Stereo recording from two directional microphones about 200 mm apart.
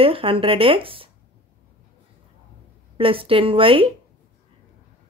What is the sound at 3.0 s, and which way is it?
Speech, 25° right (ahead or behind).